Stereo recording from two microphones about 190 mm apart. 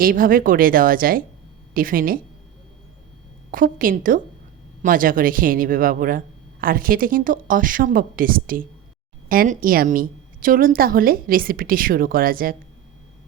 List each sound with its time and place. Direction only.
0.0 s speech: 45° right (ahead or behind)
3.5 s speech: 45° right (ahead or behind)